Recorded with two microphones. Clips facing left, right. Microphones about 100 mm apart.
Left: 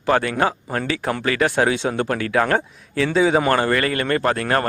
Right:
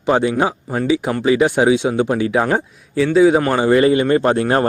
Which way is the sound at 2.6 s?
5° right (ahead or behind).